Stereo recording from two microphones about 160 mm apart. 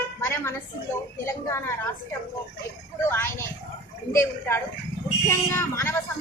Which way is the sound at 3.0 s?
15° left (ahead or behind).